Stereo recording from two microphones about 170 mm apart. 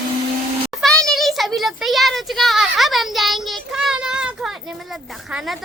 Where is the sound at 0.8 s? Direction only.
5° left (ahead or behind).